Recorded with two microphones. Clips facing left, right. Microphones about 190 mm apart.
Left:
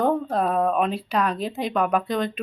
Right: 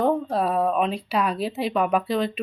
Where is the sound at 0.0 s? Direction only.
5° right (ahead or behind).